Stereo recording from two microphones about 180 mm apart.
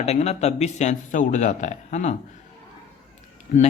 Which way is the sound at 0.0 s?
35° left (ahead or behind).